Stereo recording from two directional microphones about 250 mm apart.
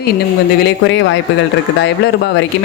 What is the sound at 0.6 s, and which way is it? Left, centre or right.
Speech, left.